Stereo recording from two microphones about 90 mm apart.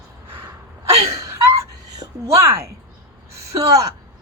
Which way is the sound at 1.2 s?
30° right (ahead or behind).